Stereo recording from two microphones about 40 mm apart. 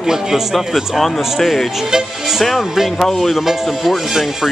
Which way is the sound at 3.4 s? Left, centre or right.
Centre.